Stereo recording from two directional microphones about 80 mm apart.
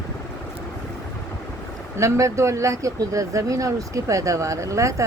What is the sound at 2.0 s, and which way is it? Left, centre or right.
Speech, right.